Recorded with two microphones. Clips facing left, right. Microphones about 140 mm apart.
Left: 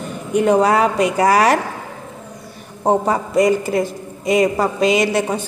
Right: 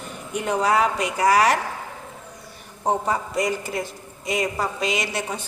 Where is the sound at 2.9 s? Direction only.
55° left (ahead or behind).